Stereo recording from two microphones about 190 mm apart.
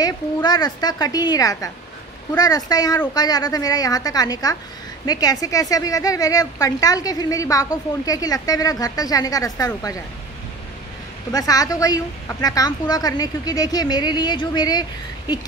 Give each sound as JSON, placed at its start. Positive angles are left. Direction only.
{"t": 0.0, "sound": "a woman's voice", "side_deg": 20}
{"t": 11.3, "sound": "a woman's voice", "side_deg": 20}